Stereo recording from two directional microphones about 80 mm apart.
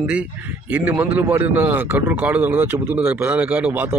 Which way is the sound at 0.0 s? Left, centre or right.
Centre.